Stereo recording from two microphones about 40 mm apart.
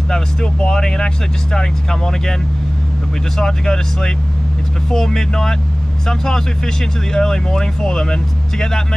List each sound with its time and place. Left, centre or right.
0.1 s speech: left
3.3 s speech: centre